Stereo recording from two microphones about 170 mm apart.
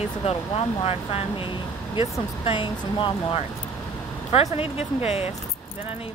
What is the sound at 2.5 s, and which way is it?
Speech, 30° left (ahead or behind).